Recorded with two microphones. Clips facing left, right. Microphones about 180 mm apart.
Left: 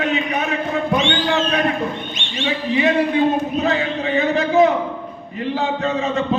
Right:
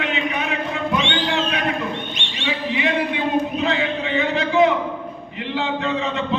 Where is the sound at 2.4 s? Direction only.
40° left (ahead or behind).